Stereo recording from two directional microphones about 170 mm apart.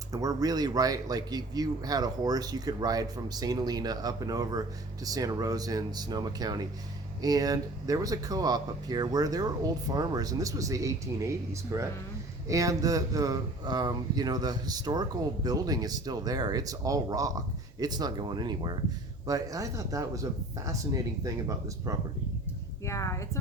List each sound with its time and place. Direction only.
0.1 s a man's voice: 20° right (ahead or behind)
22.9 s a woman's voice: 15° left (ahead or behind)